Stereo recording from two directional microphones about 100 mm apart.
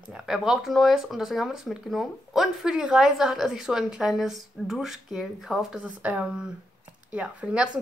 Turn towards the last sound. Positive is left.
turn(degrees=-10)  # may be behind; listen again after turning